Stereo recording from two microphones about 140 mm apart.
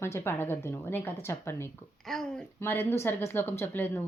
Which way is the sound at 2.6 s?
15° left (ahead or behind).